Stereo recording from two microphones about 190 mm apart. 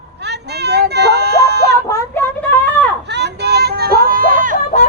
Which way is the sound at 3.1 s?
60° right (ahead or behind).